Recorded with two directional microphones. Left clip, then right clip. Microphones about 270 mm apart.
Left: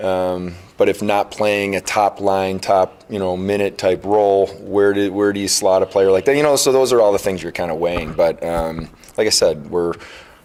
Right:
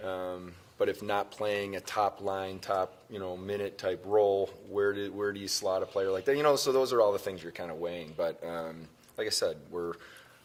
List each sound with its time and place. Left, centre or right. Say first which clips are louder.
0.0 s speech: left 17 dB; left
9.1 s speech: left 16 dB; left